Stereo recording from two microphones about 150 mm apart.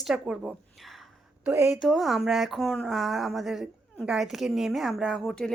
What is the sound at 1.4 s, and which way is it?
Speech, 15° right (ahead or behind).